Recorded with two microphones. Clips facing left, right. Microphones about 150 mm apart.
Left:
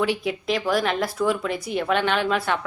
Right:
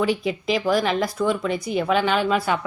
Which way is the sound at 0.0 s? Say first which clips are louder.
Right 2 dB; centre (ahead or behind).